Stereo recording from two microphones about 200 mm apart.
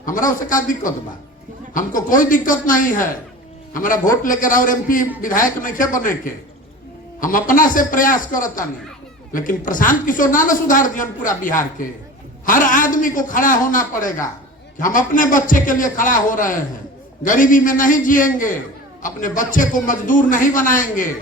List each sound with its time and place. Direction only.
0.0 s a woman's voice: 40° left (ahead or behind)